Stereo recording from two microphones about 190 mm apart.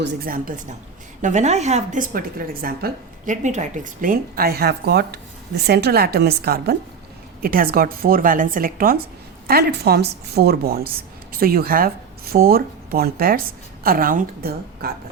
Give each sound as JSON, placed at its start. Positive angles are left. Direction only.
{"t": 0.0, "sound": "a woman's voice", "side_deg": -60}